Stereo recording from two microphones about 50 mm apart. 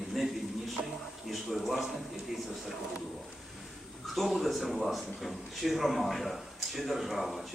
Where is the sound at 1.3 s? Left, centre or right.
Centre.